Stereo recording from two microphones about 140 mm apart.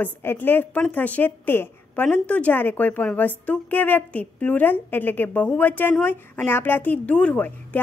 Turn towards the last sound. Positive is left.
turn(degrees=10)  # may be behind; listen again after turning